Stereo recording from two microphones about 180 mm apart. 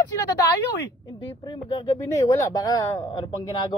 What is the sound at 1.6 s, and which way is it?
Speech, 25° left (ahead or behind).